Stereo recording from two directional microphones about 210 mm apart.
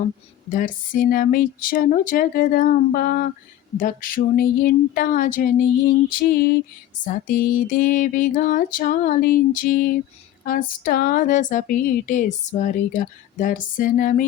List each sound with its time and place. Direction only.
0.5 s speech: 40° left (ahead or behind)
6.1 s music: 45° left (ahead or behind)
7.0 s speech: 40° left (ahead or behind)